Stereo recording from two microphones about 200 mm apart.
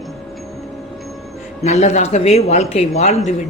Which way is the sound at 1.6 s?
35° left (ahead or behind).